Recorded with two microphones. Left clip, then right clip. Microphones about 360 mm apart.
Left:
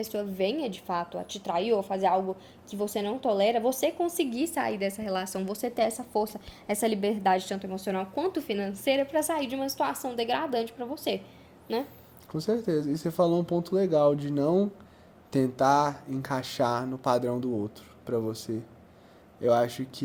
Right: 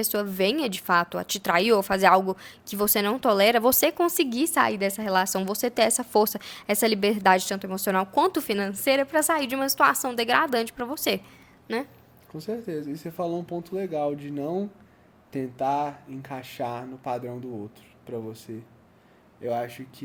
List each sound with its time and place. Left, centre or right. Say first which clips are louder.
0.0 s a woman's voice: right 4 dB; right
12.3 s speech: left 4 dB; centre